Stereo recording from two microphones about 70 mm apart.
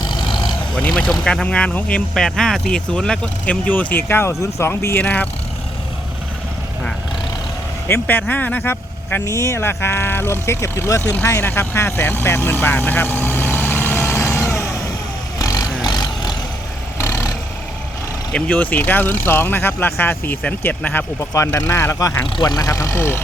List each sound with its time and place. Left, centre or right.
0.8 s speech: centre; by 5.0 s left
5.0 s speech: left
8.0 s speech: left
9.2 s speech: left
9.6 s speech: left
11.2 s speech: left
14.0 s vehicle: left
15.4 s vehicle: left
15.8 s vehicle: left
17.0 s vehicle: left
18.3 s speech: centre
18.5 s speech: left
21.2 s speech: left
21.9 s speech: left